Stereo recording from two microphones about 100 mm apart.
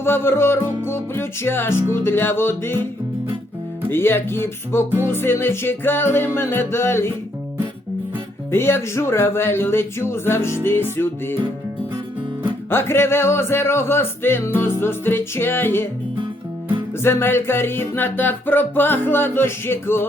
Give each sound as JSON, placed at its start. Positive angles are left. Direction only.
{"t": 0.0, "sound": "music", "side_deg": 25}
{"t": 3.8, "sound": "music", "side_deg": 20}
{"t": 8.4, "sound": "music", "side_deg": 25}
{"t": 12.7, "sound": "music", "side_deg": 25}
{"t": 17.0, "sound": "music", "side_deg": 25}